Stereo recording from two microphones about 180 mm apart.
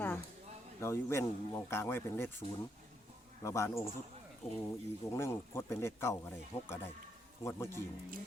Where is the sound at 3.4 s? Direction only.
15° left (ahead or behind).